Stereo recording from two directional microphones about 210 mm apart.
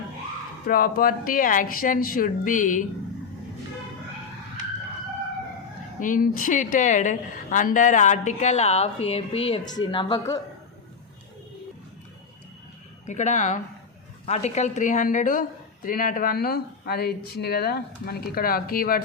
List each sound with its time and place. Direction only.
0.7 s a woman's voice: 45° left (ahead or behind)
6.0 s a woman's voice: 40° left (ahead or behind); by 10.4 s 20° left (ahead or behind)
13.1 s a woman's voice: 35° left (ahead or behind)